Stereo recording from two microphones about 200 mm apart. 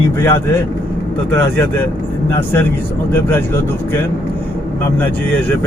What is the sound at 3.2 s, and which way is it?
Speech, 10° left (ahead or behind).